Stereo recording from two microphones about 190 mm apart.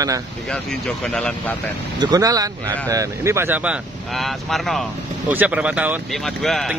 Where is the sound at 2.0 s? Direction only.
20° right (ahead or behind).